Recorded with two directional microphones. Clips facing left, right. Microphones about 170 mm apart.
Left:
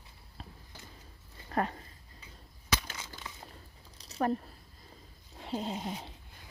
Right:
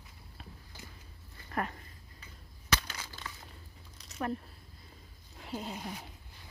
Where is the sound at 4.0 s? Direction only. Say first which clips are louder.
Left 5 dB; 35° left (ahead or behind).